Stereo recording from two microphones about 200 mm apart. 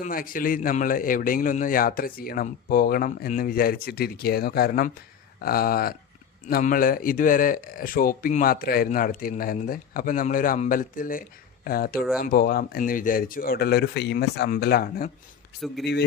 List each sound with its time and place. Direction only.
0.0 s a man's voice: 45° left (ahead or behind)
15.6 s speech: centre (ahead or behind)